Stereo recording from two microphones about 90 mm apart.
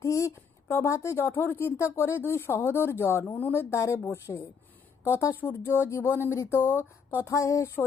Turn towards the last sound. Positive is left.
turn(degrees=35)  # may be behind; listen again after turning